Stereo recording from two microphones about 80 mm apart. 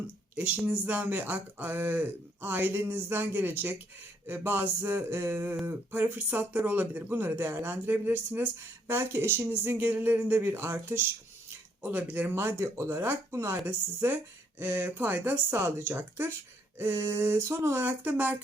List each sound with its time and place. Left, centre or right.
0.3 s speech: centre
12.3 s speech: right